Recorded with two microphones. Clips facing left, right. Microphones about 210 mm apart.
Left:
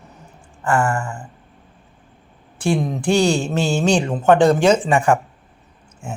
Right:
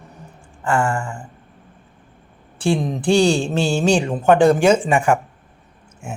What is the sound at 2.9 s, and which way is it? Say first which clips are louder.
Mantra: right 3 dB; 10° right (ahead or behind).